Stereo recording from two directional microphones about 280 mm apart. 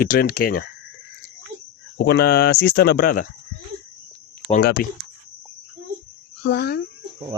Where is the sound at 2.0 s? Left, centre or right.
Left.